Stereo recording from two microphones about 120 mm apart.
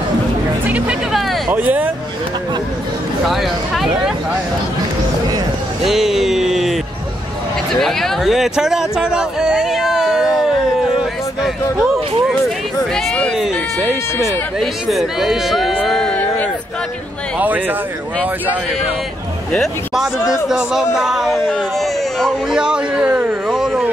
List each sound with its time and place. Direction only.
0.7 s speech: 10° right (ahead or behind)
3.3 s a man's voice: centre (ahead or behind)
5.9 s music: 5° right (ahead or behind)
7.7 s speech: centre (ahead or behind)
12.9 s a sound: 10° left (ahead or behind)
14.2 s speech: centre (ahead or behind)
17.4 s speech: 15° right (ahead or behind)
19.5 s a man's voice: 5° left (ahead or behind); by 23.3 s 10° right (ahead or behind)
23.5 s a sound: centre (ahead or behind)